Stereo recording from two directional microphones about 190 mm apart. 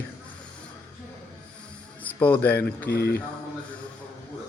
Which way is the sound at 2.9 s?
55° left (ahead or behind).